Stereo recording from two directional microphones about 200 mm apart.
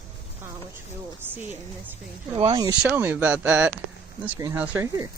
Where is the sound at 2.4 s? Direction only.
30° right (ahead or behind).